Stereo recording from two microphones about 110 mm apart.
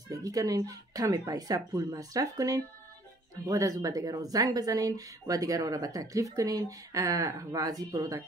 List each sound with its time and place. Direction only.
0.1 s speech: 30° right (ahead or behind)